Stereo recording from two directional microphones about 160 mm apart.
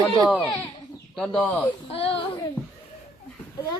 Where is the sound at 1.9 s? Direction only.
35° left (ahead or behind).